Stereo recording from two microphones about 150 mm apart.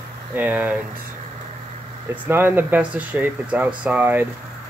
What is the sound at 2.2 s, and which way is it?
Speech, 15° right (ahead or behind).